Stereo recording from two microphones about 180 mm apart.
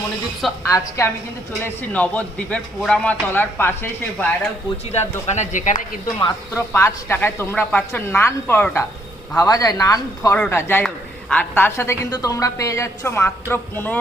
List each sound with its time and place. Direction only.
0.7 s a woman's voice: 15° left (ahead or behind)
4.9 s speech: 40° left (ahead or behind)
6.2 s a woman's voice: 15° left (ahead or behind)